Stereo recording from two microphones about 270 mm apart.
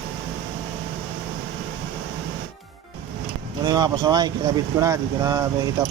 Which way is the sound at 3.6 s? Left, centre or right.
Centre.